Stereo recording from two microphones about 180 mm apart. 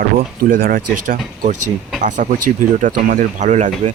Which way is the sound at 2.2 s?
45° right (ahead or behind).